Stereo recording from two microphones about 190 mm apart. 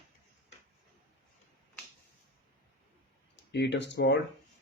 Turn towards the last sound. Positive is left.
turn(degrees=65)  # may be behind; listen again after turning